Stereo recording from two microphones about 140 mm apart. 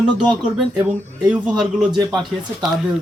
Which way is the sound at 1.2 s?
5° right (ahead or behind).